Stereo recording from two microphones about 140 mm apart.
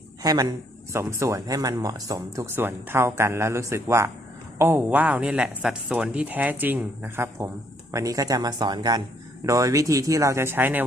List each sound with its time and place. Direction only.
0.2 s speech: 25° right (ahead or behind)